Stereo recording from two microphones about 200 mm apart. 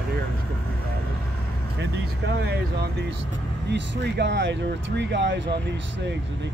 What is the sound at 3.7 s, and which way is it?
Speech, 60° right (ahead or behind).